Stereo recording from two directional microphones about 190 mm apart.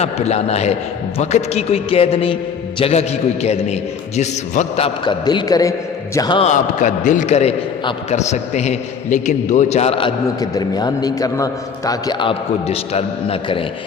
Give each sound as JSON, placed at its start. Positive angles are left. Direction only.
{"t": 0.0, "sound": "a man's voice", "side_deg": 35}
{"t": 5.0, "sound": "a man's voice", "side_deg": 25}
{"t": 6.4, "sound": "a man's voice", "side_deg": 40}